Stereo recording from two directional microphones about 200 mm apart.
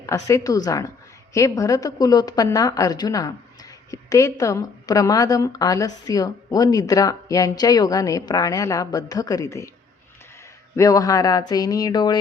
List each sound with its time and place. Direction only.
0.0 s a woman's voice: 15° left (ahead or behind)
10.8 s a woman's voice: 15° left (ahead or behind)